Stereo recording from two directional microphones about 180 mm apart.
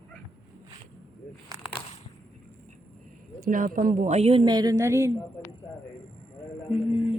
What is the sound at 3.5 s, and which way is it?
Speech, 50° right (ahead or behind).